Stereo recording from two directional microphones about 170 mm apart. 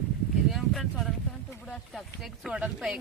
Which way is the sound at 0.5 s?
Centre (ahead or behind).